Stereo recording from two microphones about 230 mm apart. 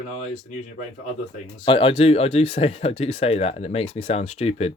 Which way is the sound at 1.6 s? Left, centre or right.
Left.